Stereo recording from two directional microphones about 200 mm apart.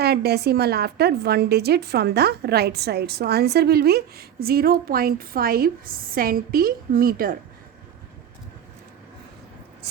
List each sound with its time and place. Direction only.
0.0 s a woman's voice: 55° right (ahead or behind)